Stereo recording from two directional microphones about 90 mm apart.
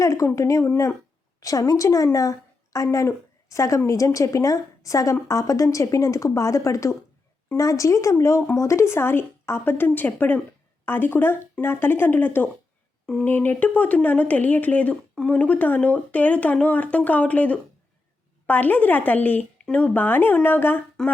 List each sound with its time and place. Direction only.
0.0 s a woman's voice: 35° left (ahead or behind); by 20.8 s 20° left (ahead or behind)